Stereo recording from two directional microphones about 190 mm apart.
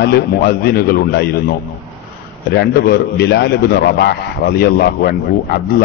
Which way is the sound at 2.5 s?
60° left (ahead or behind).